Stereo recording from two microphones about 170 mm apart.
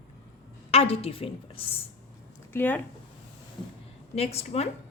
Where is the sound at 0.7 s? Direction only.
35° left (ahead or behind).